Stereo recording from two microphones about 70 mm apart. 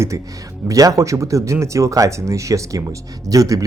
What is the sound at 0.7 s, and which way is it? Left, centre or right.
Speech, right.